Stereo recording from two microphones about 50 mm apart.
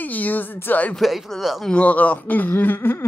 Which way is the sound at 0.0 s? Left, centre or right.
Left.